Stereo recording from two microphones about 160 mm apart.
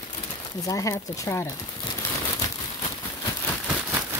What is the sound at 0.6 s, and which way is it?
Speech, 20° left (ahead or behind).